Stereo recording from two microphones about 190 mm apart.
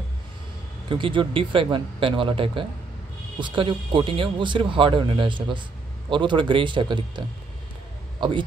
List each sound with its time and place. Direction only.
0.8 s speech: 25° right (ahead or behind)